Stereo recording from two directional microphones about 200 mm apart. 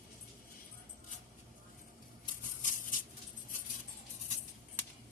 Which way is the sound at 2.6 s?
40° left (ahead or behind).